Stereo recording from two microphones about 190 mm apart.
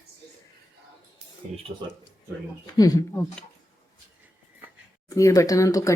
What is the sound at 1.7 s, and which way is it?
Speech, 30° right (ahead or behind).